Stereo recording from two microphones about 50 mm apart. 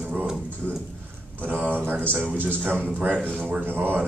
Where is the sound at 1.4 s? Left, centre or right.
Right.